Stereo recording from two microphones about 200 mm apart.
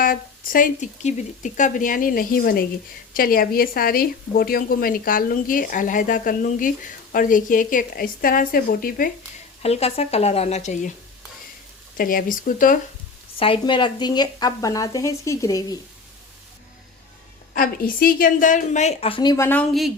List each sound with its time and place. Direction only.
0.0 s a woman's voice: 45° left (ahead or behind)
9.6 s a woman's voice: 30° left (ahead or behind)
11.9 s a woman's voice: 45° left (ahead or behind)
13.4 s speech: 25° left (ahead or behind)
17.5 s a woman's voice: 45° left (ahead or behind); by 19.9 s 5° left (ahead or behind)